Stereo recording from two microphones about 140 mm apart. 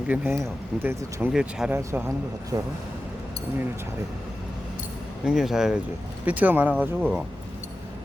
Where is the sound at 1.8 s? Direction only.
20° right (ahead or behind).